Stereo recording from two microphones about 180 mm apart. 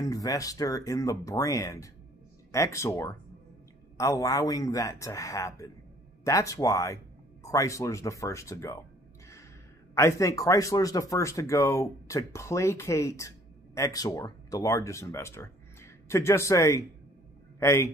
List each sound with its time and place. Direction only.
0.0 s speech: 20° left (ahead or behind)
9.9 s speech: 15° left (ahead or behind)